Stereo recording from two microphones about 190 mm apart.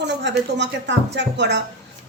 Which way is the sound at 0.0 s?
65° right (ahead or behind).